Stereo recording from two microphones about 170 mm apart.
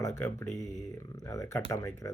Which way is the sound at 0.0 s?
15° left (ahead or behind).